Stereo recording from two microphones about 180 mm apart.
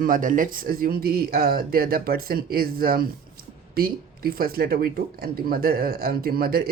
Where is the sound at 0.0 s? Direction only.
50° right (ahead or behind).